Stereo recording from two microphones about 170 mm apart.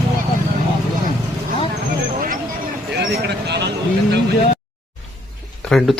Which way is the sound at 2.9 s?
75° right (ahead or behind).